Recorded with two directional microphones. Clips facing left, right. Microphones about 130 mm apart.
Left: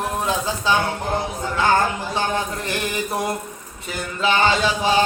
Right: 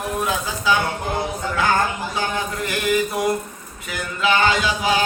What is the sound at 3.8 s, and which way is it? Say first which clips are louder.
Mantra: even; 30° left (ahead or behind).